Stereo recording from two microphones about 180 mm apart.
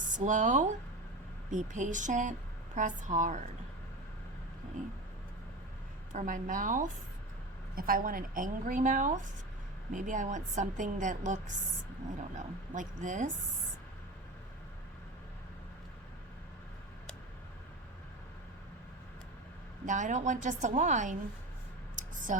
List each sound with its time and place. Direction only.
0.0 s a woman's voice: 45° right (ahead or behind)
6.1 s a woman's voice: 50° right (ahead or behind)
12.7 s a woman's voice: 45° right (ahead or behind)
19.8 s a woman's voice: 45° right (ahead or behind)
21.9 s a sound: 45° right (ahead or behind)